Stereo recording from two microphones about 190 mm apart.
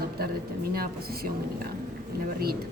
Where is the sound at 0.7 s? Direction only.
50° right (ahead or behind).